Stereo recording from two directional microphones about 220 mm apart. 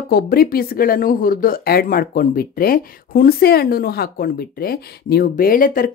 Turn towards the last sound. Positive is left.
turn(degrees=40)  # may be behind; listen again after turning